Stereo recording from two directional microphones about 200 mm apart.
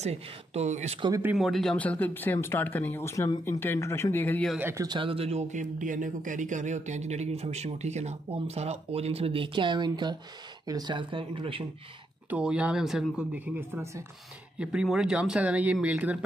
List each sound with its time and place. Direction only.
0.0 s speech: 30° right (ahead or behind)
1.0 s speech: 15° right (ahead or behind)
1.3 s speech: centre (ahead or behind)
4.6 s speech: 15° right (ahead or behind)
12.3 s speech: 5° right (ahead or behind)